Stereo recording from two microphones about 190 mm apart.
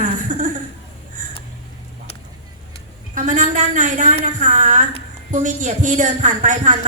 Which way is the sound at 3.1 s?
40° right (ahead or behind).